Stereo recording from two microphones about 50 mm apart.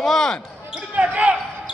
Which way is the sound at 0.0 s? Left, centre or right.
Centre.